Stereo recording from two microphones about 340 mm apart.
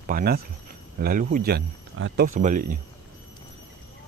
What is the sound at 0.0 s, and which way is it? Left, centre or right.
Speech, right.